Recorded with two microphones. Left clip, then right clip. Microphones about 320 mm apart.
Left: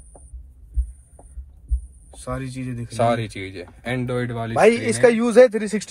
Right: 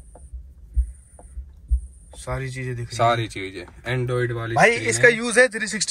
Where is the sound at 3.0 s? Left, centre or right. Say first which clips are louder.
Even; left.